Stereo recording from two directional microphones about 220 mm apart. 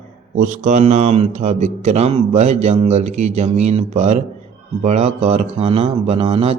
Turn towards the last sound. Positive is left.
turn(degrees=-25)  # may be behind; listen again after turning